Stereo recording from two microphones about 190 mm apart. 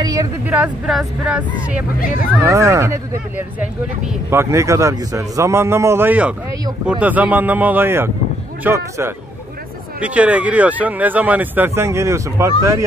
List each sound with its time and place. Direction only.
0.0 s speech: 20° right (ahead or behind)
0.5 s speech: 5° right (ahead or behind)
2.4 s speech: 15° right (ahead or behind)